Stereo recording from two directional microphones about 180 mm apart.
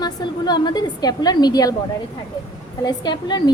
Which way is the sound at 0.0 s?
25° left (ahead or behind).